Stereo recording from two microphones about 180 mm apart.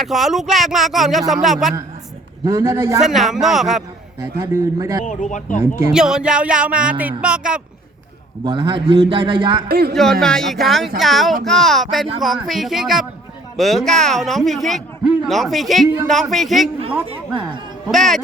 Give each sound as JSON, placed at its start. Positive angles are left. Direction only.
{"t": 0.0, "sound": "speech", "side_deg": 0}
{"t": 2.4, "sound": "a man's voice", "side_deg": -20}
{"t": 3.0, "sound": "speech", "side_deg": 0}
{"t": 4.2, "sound": "a man's voice", "side_deg": -20}
{"t": 5.0, "sound": "speech", "side_deg": 45}
{"t": 5.9, "sound": "speech", "side_deg": -5}
{"t": 8.4, "sound": "a man's voice", "side_deg": -25}
{"t": 9.6, "sound": "speech", "side_deg": -60}
{"t": 9.9, "sound": "speech", "side_deg": 0}
{"t": 17.8, "sound": "speech", "side_deg": 0}